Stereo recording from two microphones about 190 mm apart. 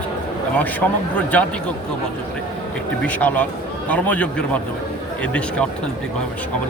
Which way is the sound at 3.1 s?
10° left (ahead or behind).